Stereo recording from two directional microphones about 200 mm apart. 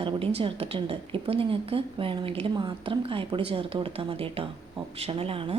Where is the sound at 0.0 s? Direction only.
30° right (ahead or behind).